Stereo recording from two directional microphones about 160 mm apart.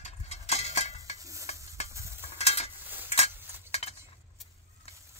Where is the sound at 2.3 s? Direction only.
40° left (ahead or behind).